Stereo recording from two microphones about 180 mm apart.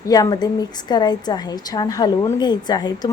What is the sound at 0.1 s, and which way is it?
A woman's voice, 20° left (ahead or behind).